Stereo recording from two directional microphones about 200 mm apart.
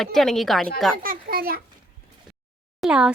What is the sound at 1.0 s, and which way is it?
Speech, 45° right (ahead or behind).